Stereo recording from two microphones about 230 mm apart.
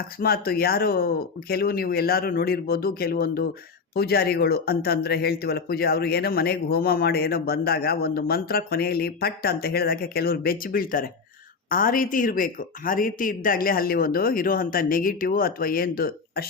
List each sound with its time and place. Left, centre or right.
0.2 s speech: left